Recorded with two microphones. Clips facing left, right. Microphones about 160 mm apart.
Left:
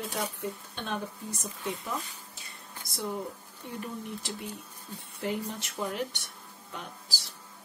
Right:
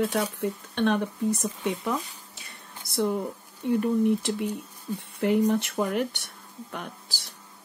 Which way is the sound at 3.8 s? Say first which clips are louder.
Right 14 dB; 60° right (ahead or behind).